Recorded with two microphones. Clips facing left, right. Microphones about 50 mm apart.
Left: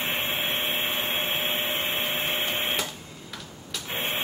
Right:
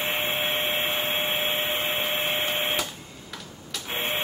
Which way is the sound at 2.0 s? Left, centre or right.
Centre.